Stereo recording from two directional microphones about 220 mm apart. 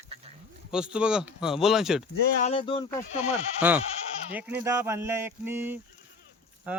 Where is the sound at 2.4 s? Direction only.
25° left (ahead or behind).